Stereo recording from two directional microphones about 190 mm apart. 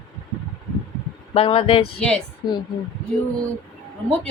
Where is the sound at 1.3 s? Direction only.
30° left (ahead or behind).